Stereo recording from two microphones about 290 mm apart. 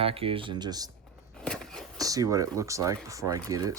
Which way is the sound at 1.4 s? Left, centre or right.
Centre.